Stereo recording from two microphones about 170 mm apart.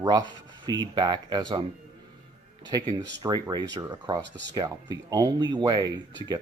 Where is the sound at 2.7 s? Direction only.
25° right (ahead or behind).